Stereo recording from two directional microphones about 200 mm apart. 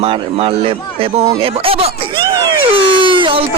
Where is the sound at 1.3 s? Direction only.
25° right (ahead or behind).